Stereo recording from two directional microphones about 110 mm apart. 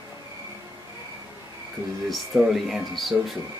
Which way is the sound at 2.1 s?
Centre (ahead or behind).